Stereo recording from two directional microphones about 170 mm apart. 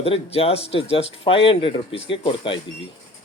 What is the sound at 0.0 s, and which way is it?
Speech, 35° left (ahead or behind).